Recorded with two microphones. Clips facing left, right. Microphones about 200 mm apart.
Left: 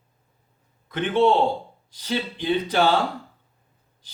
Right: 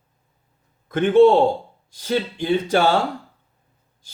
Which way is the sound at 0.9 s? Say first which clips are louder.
Right 7 dB; 45° right (ahead or behind).